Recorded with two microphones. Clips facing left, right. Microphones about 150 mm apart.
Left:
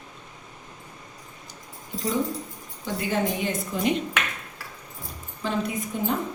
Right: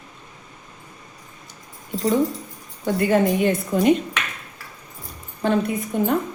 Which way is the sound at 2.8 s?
55° right (ahead or behind).